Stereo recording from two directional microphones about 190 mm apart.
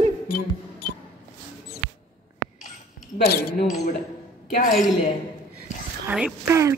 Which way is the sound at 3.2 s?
55° left (ahead or behind).